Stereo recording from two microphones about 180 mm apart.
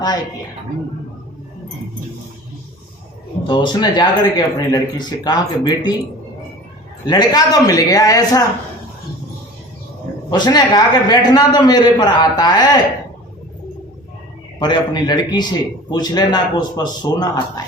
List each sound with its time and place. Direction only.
3.4 s a man's voice: 25° left (ahead or behind)
7.1 s a man's voice: 20° left (ahead or behind)
10.2 s a man's voice: 25° left (ahead or behind)
14.6 s a man's voice: 25° left (ahead or behind)